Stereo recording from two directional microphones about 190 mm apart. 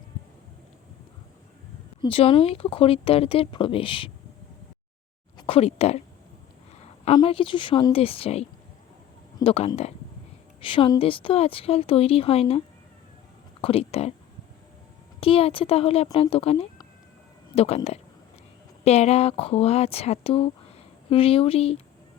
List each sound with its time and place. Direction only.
2.0 s speech: 30° left (ahead or behind)
5.4 s speech: 30° left (ahead or behind)
7.2 s speech: 25° left (ahead or behind)
15.2 s speech: 30° left (ahead or behind)